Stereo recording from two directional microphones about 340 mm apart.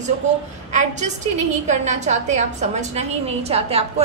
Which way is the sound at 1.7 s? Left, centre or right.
Centre.